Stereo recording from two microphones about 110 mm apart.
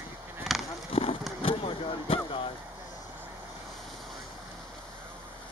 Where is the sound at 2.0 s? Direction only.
60° left (ahead or behind).